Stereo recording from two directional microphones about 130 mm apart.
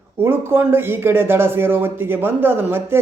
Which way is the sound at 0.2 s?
15° right (ahead or behind).